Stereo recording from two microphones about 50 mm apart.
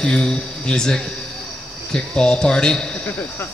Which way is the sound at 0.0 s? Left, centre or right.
Centre.